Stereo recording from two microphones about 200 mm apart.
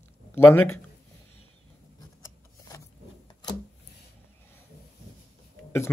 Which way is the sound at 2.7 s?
20° left (ahead or behind).